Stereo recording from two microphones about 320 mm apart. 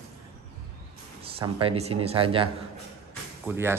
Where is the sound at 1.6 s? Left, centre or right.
Centre.